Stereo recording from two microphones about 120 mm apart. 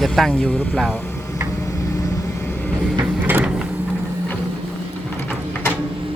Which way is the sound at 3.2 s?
15° right (ahead or behind).